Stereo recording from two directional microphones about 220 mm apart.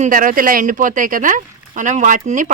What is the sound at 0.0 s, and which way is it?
Speech, 40° right (ahead or behind).